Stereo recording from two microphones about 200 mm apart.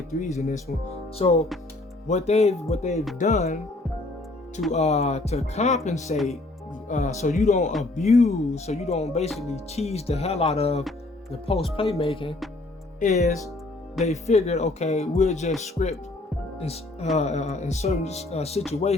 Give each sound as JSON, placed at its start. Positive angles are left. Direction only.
{"t": 0.2, "sound": "speech", "side_deg": 35}
{"t": 2.0, "sound": "speech", "side_deg": 35}
{"t": 4.7, "sound": "speech", "side_deg": 35}
{"t": 6.1, "sound": "speech", "side_deg": 0}
{"t": 6.8, "sound": "speech", "side_deg": 35}
{"t": 11.5, "sound": "music", "side_deg": 25}
{"t": 13.0, "sound": "speech", "side_deg": 35}
{"t": 16.6, "sound": "music", "side_deg": 30}
{"t": 17.2, "sound": "speech", "side_deg": 35}